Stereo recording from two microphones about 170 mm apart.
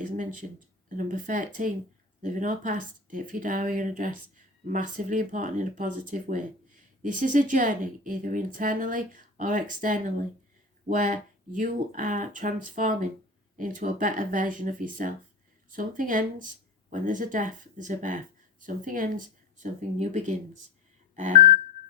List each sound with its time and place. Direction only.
0.9 s a woman's voice: 50° right (ahead or behind)